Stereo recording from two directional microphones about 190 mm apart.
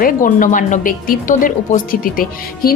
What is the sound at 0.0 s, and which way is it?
A woman's voice, 45° left (ahead or behind).